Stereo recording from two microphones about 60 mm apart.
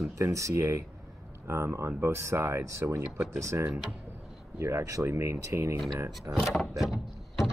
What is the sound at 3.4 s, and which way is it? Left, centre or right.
Speech, right.